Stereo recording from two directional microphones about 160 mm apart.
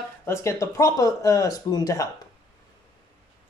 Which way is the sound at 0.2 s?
15° left (ahead or behind).